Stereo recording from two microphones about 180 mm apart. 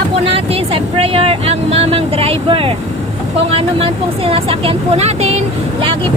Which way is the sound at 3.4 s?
35° right (ahead or behind).